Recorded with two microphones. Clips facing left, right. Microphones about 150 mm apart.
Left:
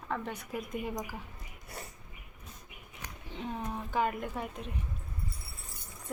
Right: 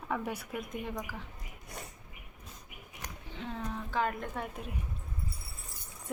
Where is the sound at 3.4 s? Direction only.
15° left (ahead or behind); by 4.7 s centre (ahead or behind).